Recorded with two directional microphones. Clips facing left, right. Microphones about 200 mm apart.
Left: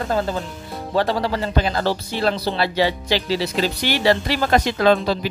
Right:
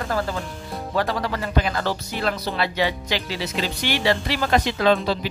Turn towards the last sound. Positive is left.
turn(degrees=45)  # may be behind; listen again after turning